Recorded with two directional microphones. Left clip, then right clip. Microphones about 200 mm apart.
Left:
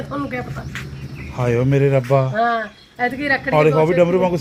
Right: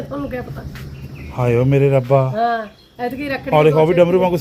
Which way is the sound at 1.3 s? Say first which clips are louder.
Right 2 dB; 10° right (ahead or behind).